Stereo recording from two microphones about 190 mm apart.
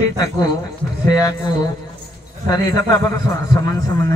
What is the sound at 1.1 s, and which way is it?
A man's voice, 20° left (ahead or behind).